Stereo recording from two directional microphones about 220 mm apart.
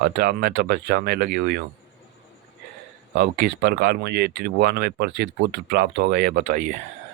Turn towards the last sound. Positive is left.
turn(degrees=-40)  # may be behind; listen again after turning